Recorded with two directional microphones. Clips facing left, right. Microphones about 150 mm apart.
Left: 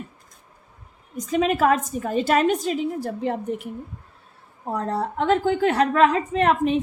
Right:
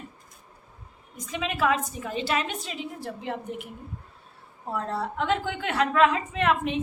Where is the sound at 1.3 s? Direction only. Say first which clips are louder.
Left 7 dB; 45° left (ahead or behind).